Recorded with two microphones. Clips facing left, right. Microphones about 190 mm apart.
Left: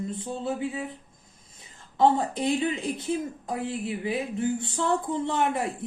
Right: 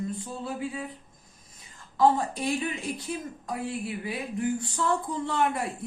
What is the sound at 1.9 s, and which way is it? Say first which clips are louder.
Speech: left 1 dB; 25° left (ahead or behind).